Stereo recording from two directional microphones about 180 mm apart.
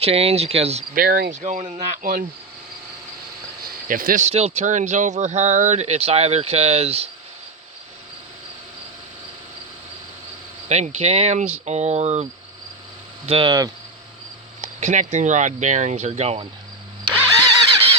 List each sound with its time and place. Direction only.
0.0 s speech: 35° right (ahead or behind)
0.9 s speech: 55° right (ahead or behind)
3.6 s speech: 50° right (ahead or behind); by 7.1 s 35° right (ahead or behind)
10.7 s speech: 40° right (ahead or behind)
14.6 s speech: 40° right (ahead or behind)